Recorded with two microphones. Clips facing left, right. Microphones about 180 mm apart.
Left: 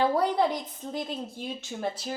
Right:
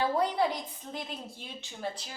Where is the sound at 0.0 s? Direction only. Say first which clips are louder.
Left 4 dB; 45° left (ahead or behind).